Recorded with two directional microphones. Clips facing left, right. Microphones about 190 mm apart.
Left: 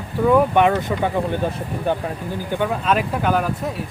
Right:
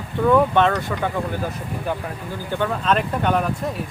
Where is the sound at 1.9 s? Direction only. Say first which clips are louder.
Left 5 dB; 30° left (ahead or behind).